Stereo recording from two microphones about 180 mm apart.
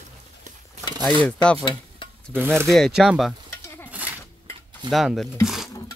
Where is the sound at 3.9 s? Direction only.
10° right (ahead or behind).